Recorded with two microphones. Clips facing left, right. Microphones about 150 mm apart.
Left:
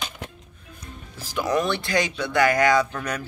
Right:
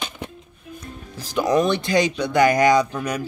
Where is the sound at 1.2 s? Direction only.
20° right (ahead or behind).